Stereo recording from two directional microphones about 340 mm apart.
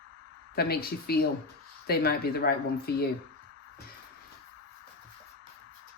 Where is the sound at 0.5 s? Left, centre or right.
Left.